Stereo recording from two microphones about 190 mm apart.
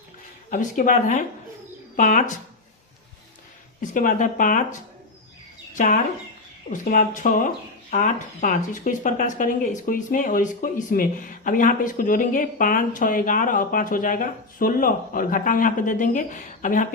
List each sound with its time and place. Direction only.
0.5 s speech: 45° left (ahead or behind)
3.8 s speech: 45° left (ahead or behind)
5.7 s speech: 45° left (ahead or behind)